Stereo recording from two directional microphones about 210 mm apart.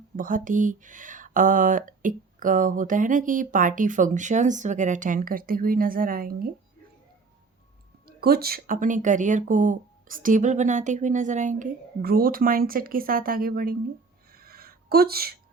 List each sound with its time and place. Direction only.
0.2 s speech: 40° right (ahead or behind)
8.0 s speech: 45° right (ahead or behind)
14.3 s a sound: 45° right (ahead or behind)